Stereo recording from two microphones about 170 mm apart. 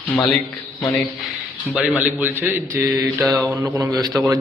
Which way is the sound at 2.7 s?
20° right (ahead or behind).